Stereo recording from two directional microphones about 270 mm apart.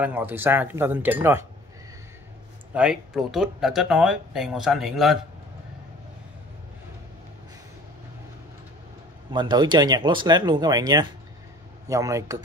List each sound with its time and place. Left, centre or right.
0.0 s speech: centre
2.7 s speech: centre
9.3 s speech: centre